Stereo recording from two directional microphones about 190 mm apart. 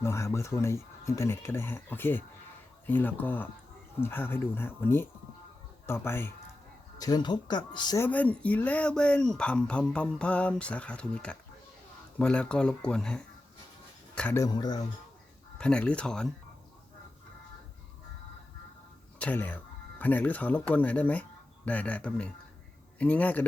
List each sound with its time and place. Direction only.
0.0 s speech: 15° left (ahead or behind)
7.0 s speech: 20° left (ahead or behind)
8.0 s speech: 10° left (ahead or behind)
15.5 s speech: 5° left (ahead or behind)
19.2 s speech: 10° left (ahead or behind)